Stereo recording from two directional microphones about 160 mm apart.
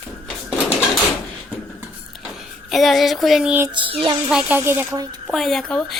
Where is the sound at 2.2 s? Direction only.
Centre (ahead or behind).